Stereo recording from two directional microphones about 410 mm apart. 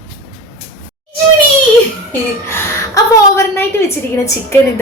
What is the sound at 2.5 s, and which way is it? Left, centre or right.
A woman's voice, centre.